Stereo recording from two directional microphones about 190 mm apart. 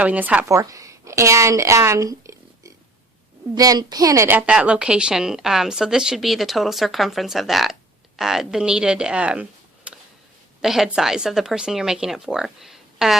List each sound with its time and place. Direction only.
0.0 s a woman's voice: 5° right (ahead or behind)